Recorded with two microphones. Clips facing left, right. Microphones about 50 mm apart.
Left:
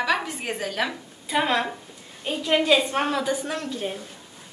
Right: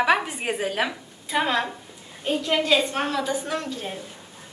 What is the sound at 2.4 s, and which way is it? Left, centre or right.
Speech, centre.